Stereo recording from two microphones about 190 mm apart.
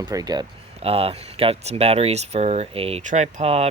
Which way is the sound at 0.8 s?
30° right (ahead or behind).